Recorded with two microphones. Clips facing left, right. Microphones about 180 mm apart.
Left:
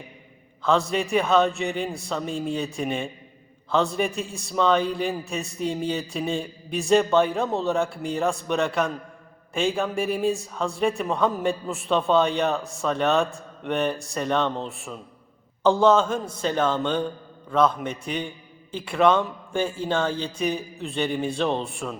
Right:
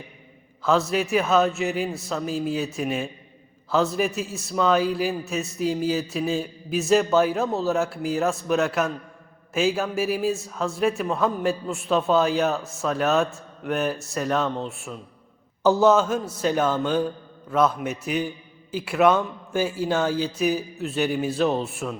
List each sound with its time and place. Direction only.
0.6 s a man's voice: 5° right (ahead or behind)